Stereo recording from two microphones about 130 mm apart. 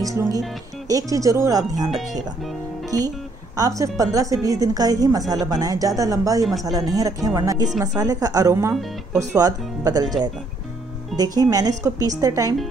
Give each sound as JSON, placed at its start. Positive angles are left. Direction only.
{"t": 0.0, "sound": "a woman's voice", "side_deg": -25}
{"t": 2.9, "sound": "a woman's voice", "side_deg": -30}